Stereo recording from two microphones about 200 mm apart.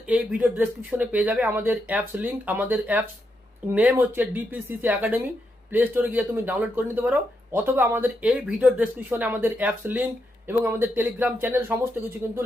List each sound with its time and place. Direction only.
0.1 s speech: 5° right (ahead or behind)